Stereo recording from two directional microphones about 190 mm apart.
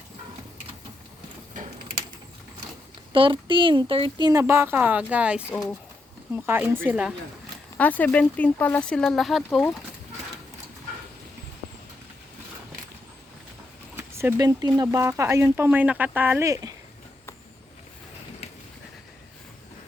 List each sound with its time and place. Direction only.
1.5 s a sound: 45° right (ahead or behind)
3.1 s speech: 25° right (ahead or behind); by 7.1 s 5° right (ahead or behind)
7.8 s speech: 10° left (ahead or behind)
13.9 s speech: 15° right (ahead or behind)